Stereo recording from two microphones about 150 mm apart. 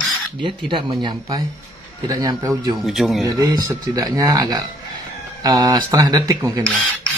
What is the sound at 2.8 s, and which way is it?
Speech, centre (ahead or behind).